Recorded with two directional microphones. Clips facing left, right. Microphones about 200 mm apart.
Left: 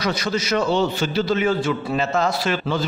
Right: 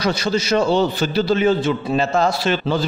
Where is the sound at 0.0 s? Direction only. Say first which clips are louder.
Right 3 dB; 30° right (ahead or behind).